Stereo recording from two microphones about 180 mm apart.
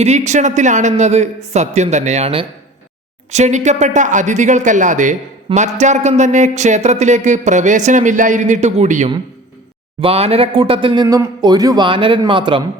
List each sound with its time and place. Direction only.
0.0 s speech: 40° right (ahead or behind)